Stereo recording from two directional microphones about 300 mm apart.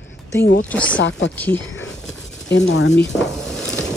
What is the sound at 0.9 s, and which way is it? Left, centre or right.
Speech, left.